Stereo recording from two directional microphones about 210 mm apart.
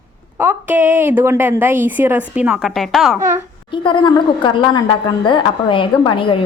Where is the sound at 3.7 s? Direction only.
25° left (ahead or behind).